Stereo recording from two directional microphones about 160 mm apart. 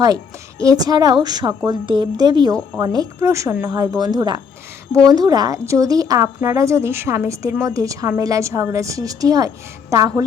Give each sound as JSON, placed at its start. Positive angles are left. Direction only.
{"t": 0.6, "sound": "a woman's voice", "side_deg": -20}